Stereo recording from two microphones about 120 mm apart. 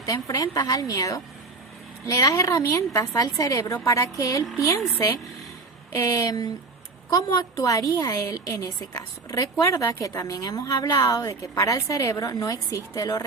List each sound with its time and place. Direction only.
0.0 s a woman's voice: 30° left (ahead or behind)
5.9 s a woman's voice: 25° left (ahead or behind)